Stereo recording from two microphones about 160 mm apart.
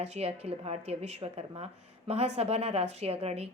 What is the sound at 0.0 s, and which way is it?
A woman's voice, 40° right (ahead or behind).